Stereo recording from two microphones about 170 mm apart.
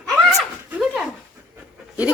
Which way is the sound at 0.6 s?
5° right (ahead or behind).